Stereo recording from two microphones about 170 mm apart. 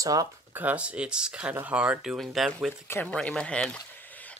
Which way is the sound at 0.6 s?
5° right (ahead or behind).